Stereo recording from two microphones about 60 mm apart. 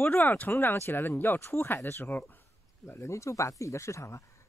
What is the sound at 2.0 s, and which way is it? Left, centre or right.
Speech, left.